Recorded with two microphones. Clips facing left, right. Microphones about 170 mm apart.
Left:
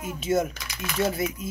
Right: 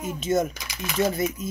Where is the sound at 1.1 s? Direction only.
5° left (ahead or behind).